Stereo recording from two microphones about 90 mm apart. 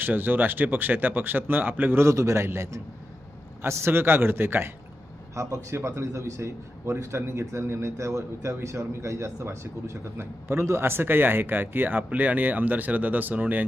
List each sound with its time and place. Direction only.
0.0 s a man's voice: 20° right (ahead or behind)